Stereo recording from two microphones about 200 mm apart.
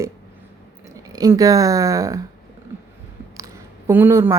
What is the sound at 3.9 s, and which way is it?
Speech, 10° right (ahead or behind).